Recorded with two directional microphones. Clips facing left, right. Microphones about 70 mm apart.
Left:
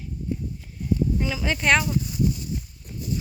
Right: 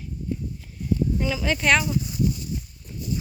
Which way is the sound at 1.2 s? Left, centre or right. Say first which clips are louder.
Right 2 dB; centre.